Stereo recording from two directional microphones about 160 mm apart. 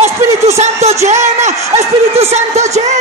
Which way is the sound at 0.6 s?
45° right (ahead or behind).